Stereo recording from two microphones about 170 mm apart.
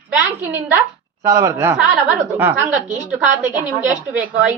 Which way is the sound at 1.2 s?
20° right (ahead or behind).